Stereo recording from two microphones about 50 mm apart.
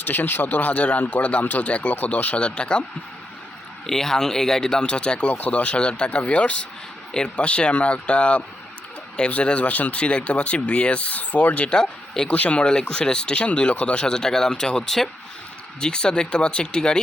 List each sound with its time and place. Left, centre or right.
0.0 s speech: left
3.8 s speech: centre
5.3 s speech: left
11.7 s speech: centre